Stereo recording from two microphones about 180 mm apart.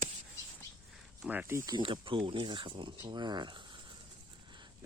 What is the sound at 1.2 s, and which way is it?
Speech, 10° right (ahead or behind).